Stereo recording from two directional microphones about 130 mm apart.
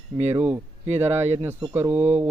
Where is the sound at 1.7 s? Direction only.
15° right (ahead or behind).